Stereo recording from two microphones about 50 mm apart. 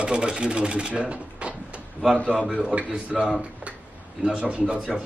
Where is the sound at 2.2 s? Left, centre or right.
Left.